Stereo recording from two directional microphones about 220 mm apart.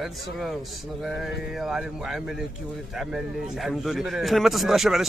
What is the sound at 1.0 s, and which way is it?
Speech, centre (ahead or behind).